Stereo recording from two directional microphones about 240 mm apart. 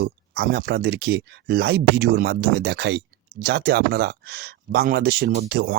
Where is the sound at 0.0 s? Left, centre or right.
Right.